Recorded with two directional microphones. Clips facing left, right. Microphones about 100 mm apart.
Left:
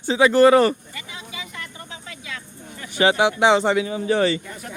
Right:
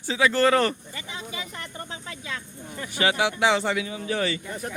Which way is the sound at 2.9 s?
25° left (ahead or behind).